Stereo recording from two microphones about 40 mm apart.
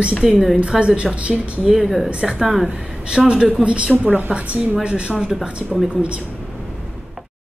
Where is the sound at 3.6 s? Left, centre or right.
Right.